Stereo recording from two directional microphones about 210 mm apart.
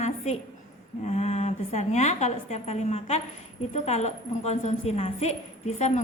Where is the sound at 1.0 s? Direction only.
30° left (ahead or behind).